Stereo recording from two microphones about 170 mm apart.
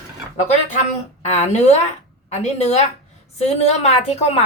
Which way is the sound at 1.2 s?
40° left (ahead or behind).